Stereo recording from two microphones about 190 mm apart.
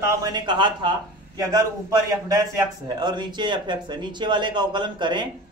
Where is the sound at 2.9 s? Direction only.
20° right (ahead or behind).